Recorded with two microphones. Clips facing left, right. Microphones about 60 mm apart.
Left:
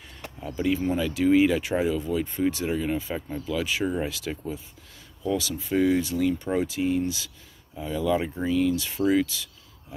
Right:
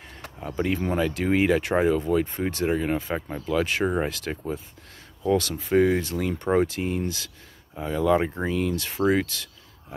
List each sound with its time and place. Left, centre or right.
0.7 s speech: right
2.5 s speech: right
3.4 s speech: right
5.2 s speech: right
7.0 s speech: right
7.7 s speech: right
9.2 s a sound: right